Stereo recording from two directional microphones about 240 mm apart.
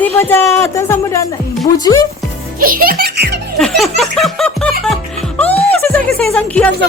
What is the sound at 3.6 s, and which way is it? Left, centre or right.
Music, centre.